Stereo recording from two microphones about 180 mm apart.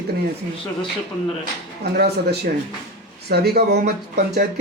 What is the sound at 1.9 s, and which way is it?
Speech, 65° right (ahead or behind).